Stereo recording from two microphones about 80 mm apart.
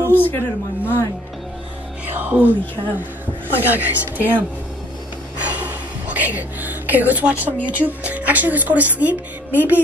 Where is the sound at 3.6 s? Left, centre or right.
Centre.